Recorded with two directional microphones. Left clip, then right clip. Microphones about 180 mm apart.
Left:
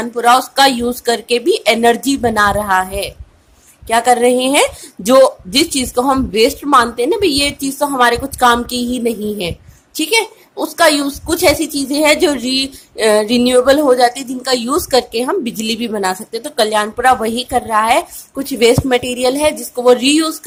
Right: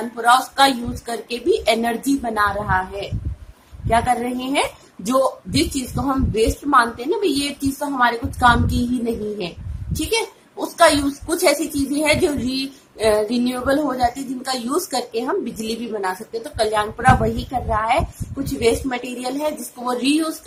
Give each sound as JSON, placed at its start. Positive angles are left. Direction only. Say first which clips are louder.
{"t": 0.2, "sound": "a woman's voice", "louder": "left 5 dB", "side_deg": 55}
{"t": 9.9, "sound": "a woman's voice", "louder": "left 7 dB", "side_deg": 55}